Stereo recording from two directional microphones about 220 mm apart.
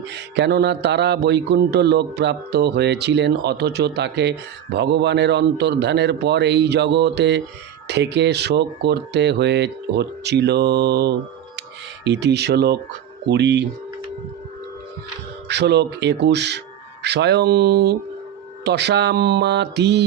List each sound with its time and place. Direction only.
0.1 s speech: 50° right (ahead or behind)
15.4 s speech: 50° right (ahead or behind)